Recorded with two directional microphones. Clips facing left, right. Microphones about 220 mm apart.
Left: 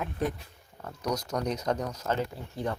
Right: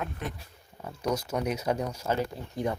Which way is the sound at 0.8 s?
10° right (ahead or behind).